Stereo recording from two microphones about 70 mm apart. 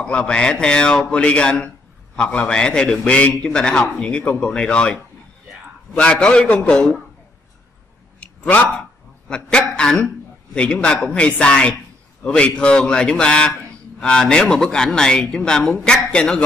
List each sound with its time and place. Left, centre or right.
0.0 s a man's voice: centre
5.9 s a man's voice: centre
8.2 s a sound: centre
9.3 s a man's voice: centre